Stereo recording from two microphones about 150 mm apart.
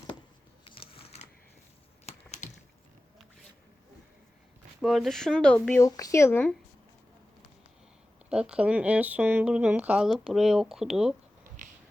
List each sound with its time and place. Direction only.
0.6 s a sound: 35° left (ahead or behind)
4.8 s speech: centre (ahead or behind)
5.8 s speech: 20° left (ahead or behind)
8.3 s speech: 5° right (ahead or behind)